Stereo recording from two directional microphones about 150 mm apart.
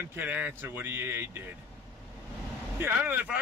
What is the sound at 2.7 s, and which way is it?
Speech, 10° right (ahead or behind).